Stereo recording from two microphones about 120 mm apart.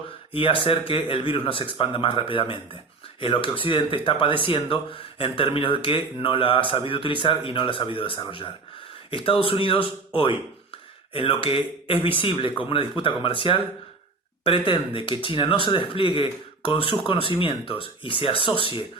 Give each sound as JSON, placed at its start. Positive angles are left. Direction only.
{"t": 0.3, "sound": "speech", "side_deg": 45}